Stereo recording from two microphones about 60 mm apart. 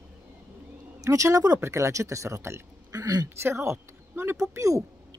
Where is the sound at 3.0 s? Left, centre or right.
Right.